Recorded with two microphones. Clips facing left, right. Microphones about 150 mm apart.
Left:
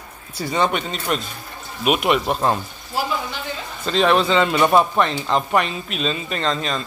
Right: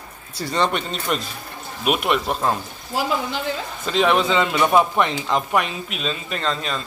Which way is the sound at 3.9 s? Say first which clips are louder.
Left 1 dB; 10° right (ahead or behind).